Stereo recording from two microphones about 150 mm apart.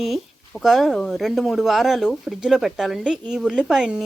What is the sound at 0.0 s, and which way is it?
Speech, centre (ahead or behind).